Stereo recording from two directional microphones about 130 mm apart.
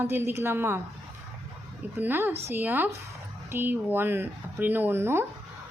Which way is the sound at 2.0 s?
15° right (ahead or behind).